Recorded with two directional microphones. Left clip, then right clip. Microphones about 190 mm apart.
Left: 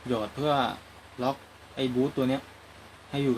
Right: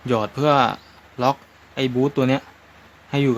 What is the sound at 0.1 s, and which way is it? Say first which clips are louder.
Speech: right 9 dB; 45° right (ahead or behind).